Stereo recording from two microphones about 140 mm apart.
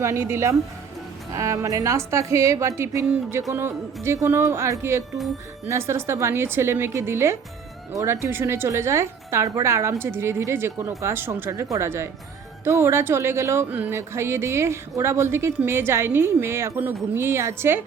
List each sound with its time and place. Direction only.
0.0 s speech: 20° right (ahead or behind)